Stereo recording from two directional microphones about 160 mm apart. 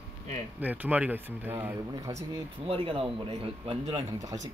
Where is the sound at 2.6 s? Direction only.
35° right (ahead or behind).